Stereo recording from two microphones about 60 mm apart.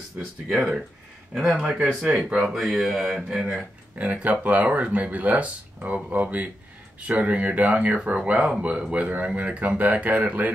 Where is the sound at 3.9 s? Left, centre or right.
Right.